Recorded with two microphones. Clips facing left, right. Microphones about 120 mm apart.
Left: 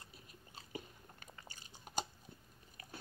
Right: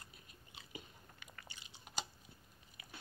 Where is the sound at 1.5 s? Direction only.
40° left (ahead or behind).